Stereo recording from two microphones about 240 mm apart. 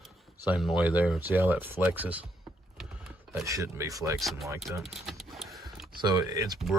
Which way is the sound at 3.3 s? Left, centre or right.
Centre.